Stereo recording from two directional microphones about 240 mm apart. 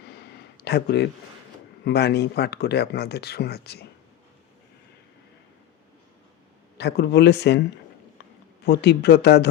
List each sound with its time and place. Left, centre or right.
0.5 s speech: left
6.7 s speech: left
8.6 s speech: left